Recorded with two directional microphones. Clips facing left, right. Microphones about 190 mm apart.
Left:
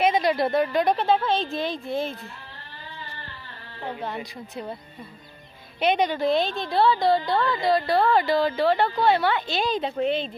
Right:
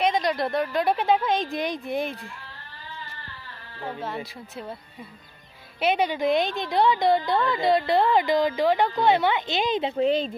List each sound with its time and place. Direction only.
0.0 s a woman's voice: 5° left (ahead or behind)
0.9 s a woman's voice: 15° right (ahead or behind)
5.8 s a woman's voice: 5° right (ahead or behind); by 10.1 s 25° right (ahead or behind)